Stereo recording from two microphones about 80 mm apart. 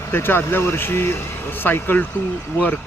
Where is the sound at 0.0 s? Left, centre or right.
Left.